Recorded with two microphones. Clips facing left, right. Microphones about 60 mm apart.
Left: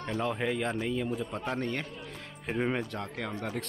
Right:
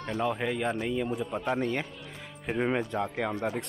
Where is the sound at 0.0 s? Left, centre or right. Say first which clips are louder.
Right 1 dB; centre.